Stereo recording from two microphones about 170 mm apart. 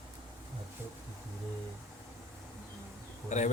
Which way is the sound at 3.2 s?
45° left (ahead or behind).